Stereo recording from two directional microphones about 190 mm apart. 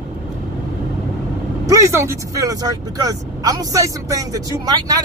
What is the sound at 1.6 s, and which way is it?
Speech, 15° right (ahead or behind).